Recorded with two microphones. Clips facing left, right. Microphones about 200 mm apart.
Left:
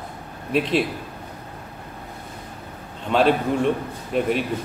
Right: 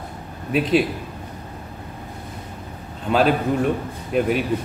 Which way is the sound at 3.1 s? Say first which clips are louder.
Even; 5° right (ahead or behind).